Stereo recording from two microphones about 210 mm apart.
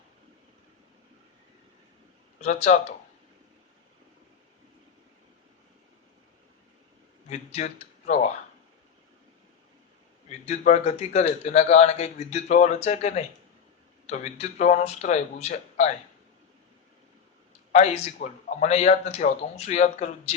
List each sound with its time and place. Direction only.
2.4 s a man's voice: 35° left (ahead or behind)
7.3 s speech: 30° left (ahead or behind)
10.2 s a man's voice: 30° left (ahead or behind)
17.7 s a man's voice: 35° left (ahead or behind)